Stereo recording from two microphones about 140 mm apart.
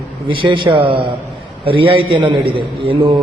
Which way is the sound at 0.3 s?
35° right (ahead or behind).